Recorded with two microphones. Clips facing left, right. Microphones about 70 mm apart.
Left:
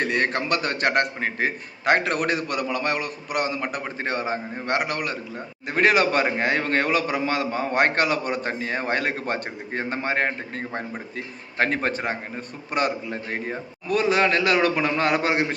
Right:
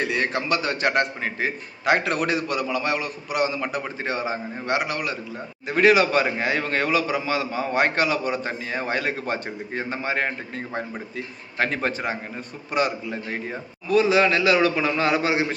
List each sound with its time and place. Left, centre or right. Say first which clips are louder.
0.0 s a man's voice: left 1 dB; left